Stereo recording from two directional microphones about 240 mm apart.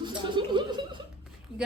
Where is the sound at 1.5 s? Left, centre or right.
Centre.